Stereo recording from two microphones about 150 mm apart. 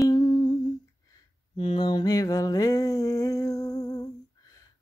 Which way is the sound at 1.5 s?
40° left (ahead or behind).